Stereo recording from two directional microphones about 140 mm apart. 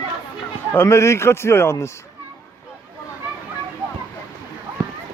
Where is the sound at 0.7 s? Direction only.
20° left (ahead or behind).